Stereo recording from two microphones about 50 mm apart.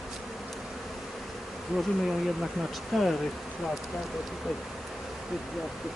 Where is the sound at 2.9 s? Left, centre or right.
Centre.